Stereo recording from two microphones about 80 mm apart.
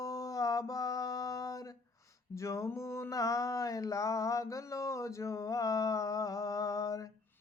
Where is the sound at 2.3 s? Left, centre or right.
Left.